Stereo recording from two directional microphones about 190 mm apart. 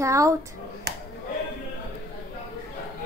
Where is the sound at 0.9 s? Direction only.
60° right (ahead or behind).